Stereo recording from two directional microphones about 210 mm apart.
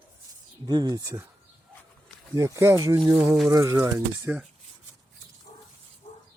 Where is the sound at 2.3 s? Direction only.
15° right (ahead or behind).